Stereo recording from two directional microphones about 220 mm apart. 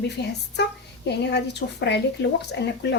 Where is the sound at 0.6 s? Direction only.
50° left (ahead or behind).